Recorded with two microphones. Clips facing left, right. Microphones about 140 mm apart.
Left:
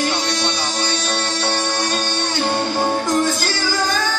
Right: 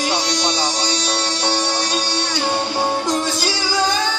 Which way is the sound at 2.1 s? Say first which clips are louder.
Left 1 dB; 55° left (ahead or behind).